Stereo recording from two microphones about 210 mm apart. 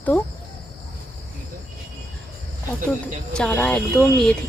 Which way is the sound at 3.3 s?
5° left (ahead or behind).